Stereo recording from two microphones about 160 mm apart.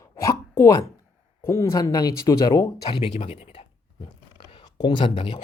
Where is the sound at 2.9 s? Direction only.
40° left (ahead or behind).